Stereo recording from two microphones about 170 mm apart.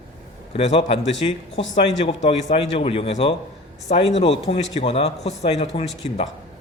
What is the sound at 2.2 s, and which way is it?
Speech, 35° left (ahead or behind).